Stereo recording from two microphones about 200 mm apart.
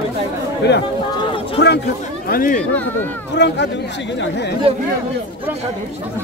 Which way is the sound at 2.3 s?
45° left (ahead or behind).